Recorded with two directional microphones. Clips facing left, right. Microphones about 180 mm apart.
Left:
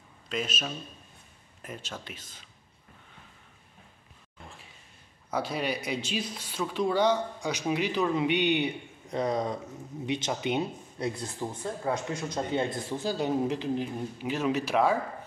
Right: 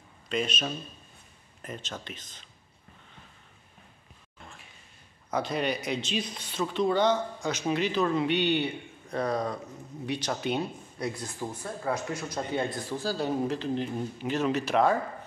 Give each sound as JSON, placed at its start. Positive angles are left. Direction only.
{"t": 0.3, "sound": "speech", "side_deg": 5}
{"t": 5.3, "sound": "speech", "side_deg": 5}
{"t": 11.9, "sound": "speech", "side_deg": -5}
{"t": 12.3, "sound": "speech", "side_deg": 25}